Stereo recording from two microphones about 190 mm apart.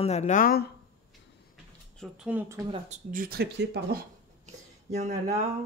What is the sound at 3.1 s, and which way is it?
Speech, 50° right (ahead or behind).